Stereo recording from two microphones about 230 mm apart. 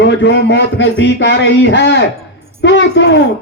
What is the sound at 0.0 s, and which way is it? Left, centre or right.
A man's voice, left.